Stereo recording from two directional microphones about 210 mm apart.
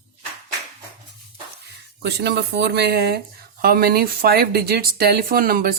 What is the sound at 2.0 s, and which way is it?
Speech, 55° right (ahead or behind).